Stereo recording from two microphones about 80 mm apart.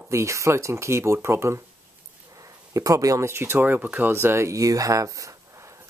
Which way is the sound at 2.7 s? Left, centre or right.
Right.